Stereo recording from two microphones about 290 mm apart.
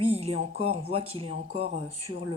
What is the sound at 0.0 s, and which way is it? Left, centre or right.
Speech, right.